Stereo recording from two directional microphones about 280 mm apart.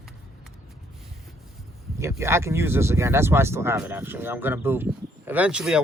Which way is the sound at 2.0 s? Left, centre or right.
Centre.